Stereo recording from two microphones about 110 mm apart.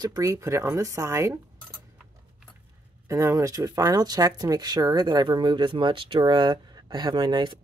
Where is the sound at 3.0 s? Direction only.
25° right (ahead or behind).